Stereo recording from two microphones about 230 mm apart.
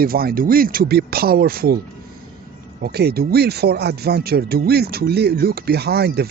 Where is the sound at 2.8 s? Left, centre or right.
Right.